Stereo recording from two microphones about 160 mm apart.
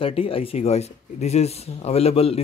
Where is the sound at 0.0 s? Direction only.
35° left (ahead or behind).